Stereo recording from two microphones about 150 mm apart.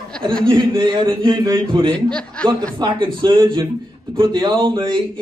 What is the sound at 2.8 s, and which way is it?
A man's voice, 30° right (ahead or behind).